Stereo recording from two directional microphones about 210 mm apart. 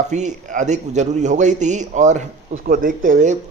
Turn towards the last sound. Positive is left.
turn(degrees=-35)  # may be behind; listen again after turning